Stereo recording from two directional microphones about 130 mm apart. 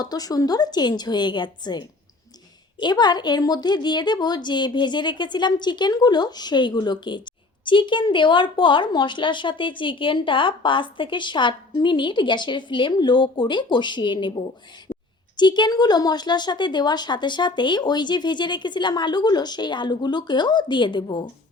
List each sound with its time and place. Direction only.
0.0 s speech: 30° left (ahead or behind)
14.9 s a sound: 35° left (ahead or behind)
15.4 s speech: 35° left (ahead or behind)